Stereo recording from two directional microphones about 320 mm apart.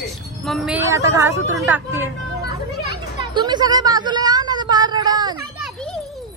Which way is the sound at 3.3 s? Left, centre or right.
Centre.